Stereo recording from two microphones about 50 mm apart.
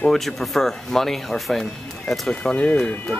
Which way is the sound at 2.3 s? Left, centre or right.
Centre.